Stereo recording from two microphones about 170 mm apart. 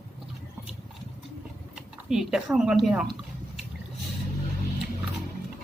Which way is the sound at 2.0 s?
5° right (ahead or behind).